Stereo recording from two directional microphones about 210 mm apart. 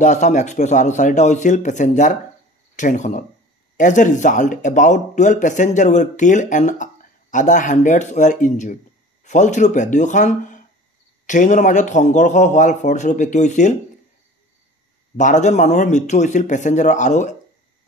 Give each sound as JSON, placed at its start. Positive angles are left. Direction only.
{"t": 0.0, "sound": "speech", "side_deg": 35}
{"t": 15.1, "sound": "speech", "side_deg": 35}